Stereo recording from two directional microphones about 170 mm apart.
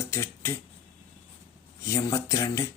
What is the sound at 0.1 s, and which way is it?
Speech, 15° left (ahead or behind).